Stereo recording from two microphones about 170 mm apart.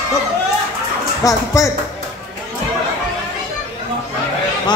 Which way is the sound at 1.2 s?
20° left (ahead or behind).